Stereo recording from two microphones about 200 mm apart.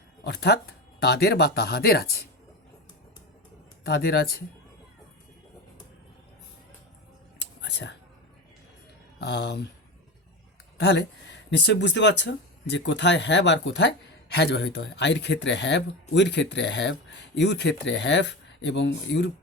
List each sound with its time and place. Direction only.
0.3 s speech: 55° left (ahead or behind)
3.8 s speech: 55° left (ahead or behind)
7.3 s whispering: 60° left (ahead or behind)
9.1 s speech: 60° left (ahead or behind)
10.8 s speech: 60° left (ahead or behind)